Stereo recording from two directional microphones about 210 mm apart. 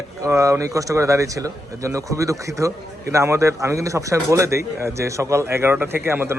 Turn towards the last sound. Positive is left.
turn(degrees=-10)  # may be behind; listen again after turning